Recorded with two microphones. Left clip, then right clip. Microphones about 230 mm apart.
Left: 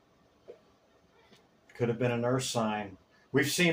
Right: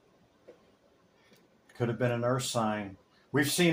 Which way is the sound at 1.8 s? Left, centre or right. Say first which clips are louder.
Even; right.